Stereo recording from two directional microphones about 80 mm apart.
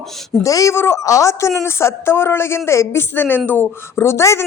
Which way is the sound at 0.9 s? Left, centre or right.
Left.